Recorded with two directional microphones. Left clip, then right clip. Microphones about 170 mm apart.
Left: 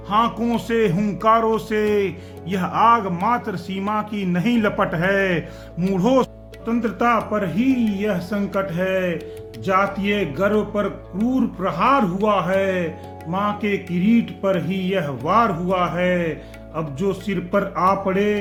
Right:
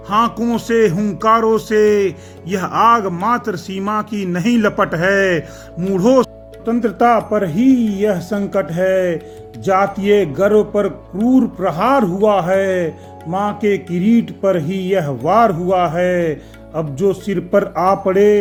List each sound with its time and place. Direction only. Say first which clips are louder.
0.1 s speech: right 4 dB; 30° right (ahead or behind)